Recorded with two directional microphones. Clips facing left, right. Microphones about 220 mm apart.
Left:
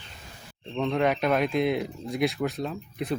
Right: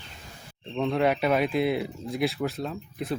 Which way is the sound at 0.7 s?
5° right (ahead or behind).